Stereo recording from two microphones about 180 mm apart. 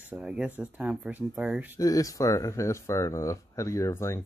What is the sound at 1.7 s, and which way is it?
Speech, 20° left (ahead or behind).